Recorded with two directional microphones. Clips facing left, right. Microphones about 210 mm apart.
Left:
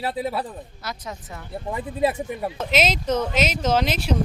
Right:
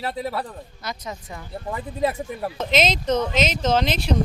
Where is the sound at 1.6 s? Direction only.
15° left (ahead or behind).